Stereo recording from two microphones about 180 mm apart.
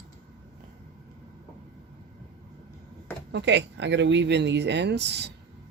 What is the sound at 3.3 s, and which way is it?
Speech, 75° right (ahead or behind).